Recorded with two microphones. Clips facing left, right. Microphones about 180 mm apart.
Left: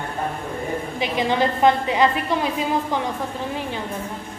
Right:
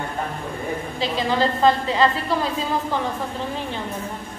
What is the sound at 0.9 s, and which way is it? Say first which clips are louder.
A woman's voice: left 1 dB; 15° left (ahead or behind).